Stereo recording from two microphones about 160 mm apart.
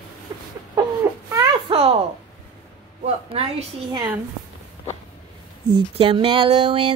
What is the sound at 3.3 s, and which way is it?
Speech, 40° right (ahead or behind).